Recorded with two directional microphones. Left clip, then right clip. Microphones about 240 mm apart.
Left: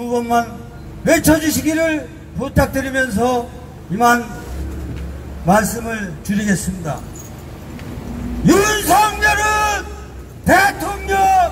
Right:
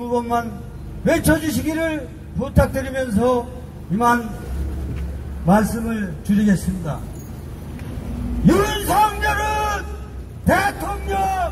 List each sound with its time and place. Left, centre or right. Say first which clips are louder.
0.0 s a man's voice: left 4 dB; left
5.5 s a man's voice: left 4 dB; left
8.5 s a sound: left 5 dB; left